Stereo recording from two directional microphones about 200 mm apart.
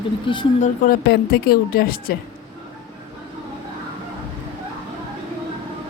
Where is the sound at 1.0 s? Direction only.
55° left (ahead or behind).